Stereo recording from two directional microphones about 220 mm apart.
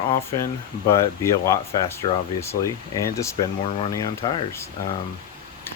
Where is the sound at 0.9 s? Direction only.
15° left (ahead or behind).